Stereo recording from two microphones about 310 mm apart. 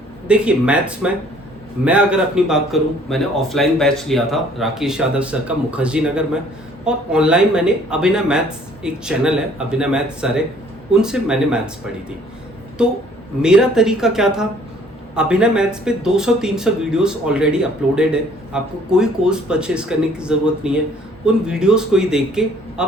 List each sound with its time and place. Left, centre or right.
0.3 s speech: centre
12.8 s speech: centre